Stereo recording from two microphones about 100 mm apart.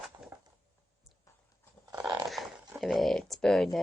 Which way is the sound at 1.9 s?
35° right (ahead or behind).